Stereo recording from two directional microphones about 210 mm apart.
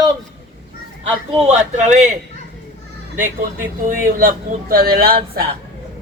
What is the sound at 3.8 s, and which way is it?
Speech, 45° right (ahead or behind).